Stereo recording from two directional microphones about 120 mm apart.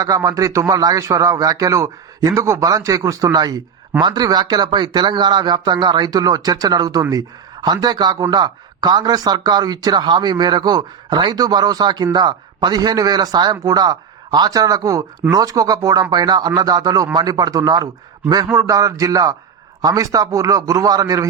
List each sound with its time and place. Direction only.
0.0 s speech: 30° right (ahead or behind)